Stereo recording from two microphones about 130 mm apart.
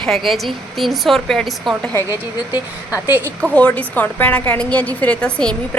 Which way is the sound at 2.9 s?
15° right (ahead or behind).